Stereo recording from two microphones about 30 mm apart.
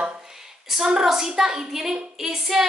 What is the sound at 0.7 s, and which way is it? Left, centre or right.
A woman's voice, centre.